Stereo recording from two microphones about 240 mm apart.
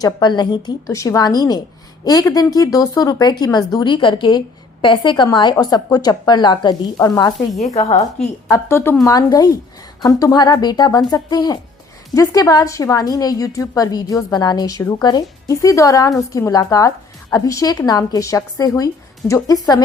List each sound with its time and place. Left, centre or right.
0.0 s a woman's voice: centre
7.6 s a woman's voice: left
8.4 s a woman's voice: centre